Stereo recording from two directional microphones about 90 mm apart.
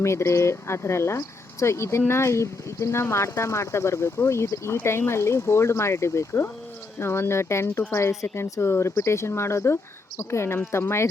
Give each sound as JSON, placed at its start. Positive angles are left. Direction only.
{"t": 0.0, "sound": "speech", "side_deg": 30}